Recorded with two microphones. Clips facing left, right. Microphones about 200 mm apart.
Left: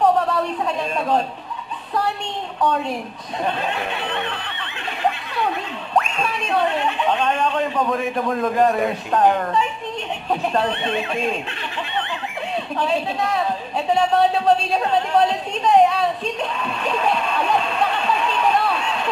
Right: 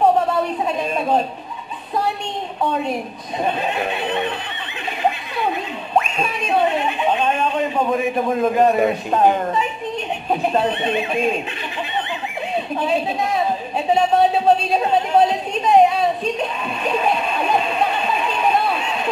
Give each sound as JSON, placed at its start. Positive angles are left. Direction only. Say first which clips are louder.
{"t": 0.7, "sound": "speech", "louder": "right 2 dB", "side_deg": -15}
{"t": 3.4, "sound": "speech", "louder": "right 2 dB", "side_deg": -10}
{"t": 5.9, "sound": "a man's voice", "louder": "right 1 dB", "side_deg": -15}
{"t": 12.5, "sound": "a man's voice", "louder": "right 2 dB", "side_deg": -15}